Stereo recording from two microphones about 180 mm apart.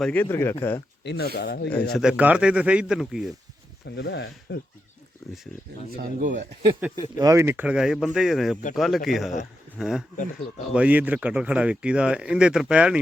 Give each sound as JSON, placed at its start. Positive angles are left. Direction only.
{"t": 0.0, "sound": "speech", "side_deg": 10}
{"t": 1.0, "sound": "speech", "side_deg": 65}
{"t": 1.9, "sound": "speech", "side_deg": -5}
{"t": 3.8, "sound": "speech", "side_deg": 70}
{"t": 5.2, "sound": "a sound", "side_deg": 0}
{"t": 6.0, "sound": "speech", "side_deg": -50}
{"t": 7.2, "sound": "speech", "side_deg": -15}